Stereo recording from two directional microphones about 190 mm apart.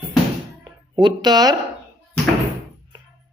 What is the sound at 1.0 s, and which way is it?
Speech, 20° right (ahead or behind).